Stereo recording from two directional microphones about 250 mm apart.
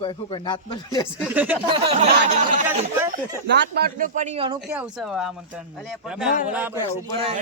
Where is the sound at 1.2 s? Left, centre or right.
Centre.